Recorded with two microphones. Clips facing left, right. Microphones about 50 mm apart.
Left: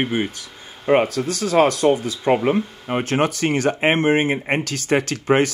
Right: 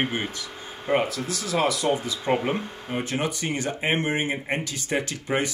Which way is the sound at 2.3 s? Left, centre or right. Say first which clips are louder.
Left 6 dB; centre.